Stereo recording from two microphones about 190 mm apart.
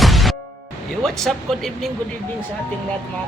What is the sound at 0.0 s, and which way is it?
Music, centre (ahead or behind).